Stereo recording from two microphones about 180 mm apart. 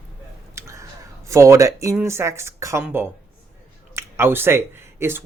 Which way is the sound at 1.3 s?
15° right (ahead or behind).